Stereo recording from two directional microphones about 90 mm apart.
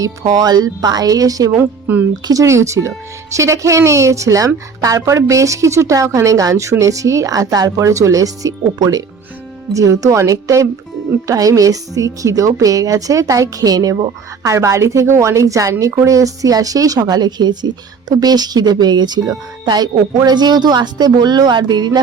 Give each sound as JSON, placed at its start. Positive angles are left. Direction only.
{"t": 0.0, "sound": "speech", "side_deg": -40}
{"t": 1.5, "sound": "a woman's voice", "side_deg": -20}
{"t": 2.2, "sound": "speech", "side_deg": -40}